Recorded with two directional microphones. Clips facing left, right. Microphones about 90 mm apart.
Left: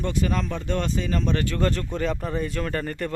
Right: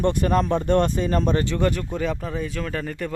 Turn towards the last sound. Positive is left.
turn(degrees=0)  # may be behind; listen again after turning